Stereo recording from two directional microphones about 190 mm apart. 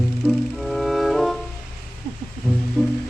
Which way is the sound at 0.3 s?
Centre (ahead or behind).